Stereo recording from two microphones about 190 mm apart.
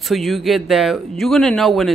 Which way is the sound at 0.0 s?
Centre (ahead or behind).